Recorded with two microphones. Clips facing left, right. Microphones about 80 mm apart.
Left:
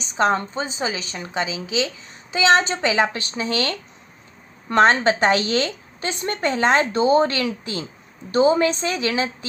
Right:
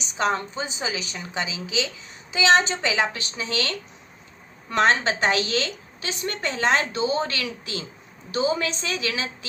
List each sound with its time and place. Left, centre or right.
0.2 s a woman's voice: left